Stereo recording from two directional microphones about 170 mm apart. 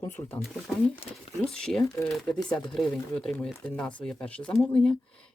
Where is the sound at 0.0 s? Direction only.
15° left (ahead or behind).